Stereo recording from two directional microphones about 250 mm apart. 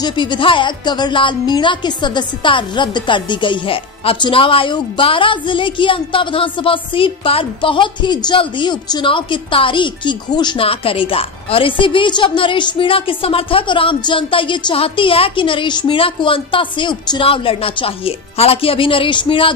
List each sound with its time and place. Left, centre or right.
0.0 s speech: centre